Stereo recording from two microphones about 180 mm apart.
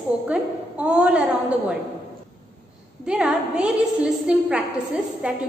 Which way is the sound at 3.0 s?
5° right (ahead or behind).